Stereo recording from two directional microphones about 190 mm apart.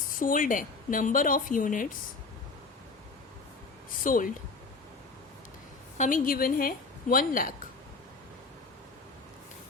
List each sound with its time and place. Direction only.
0.2 s a woman's voice: 45° left (ahead or behind)
4.0 s a woman's voice: 45° left (ahead or behind)
6.0 s a woman's voice: 45° left (ahead or behind)